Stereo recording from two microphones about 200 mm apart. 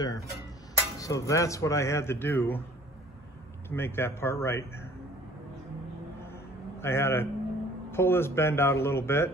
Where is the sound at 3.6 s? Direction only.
10° left (ahead or behind).